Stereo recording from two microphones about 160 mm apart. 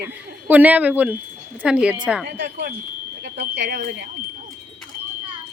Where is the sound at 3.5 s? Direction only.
85° right.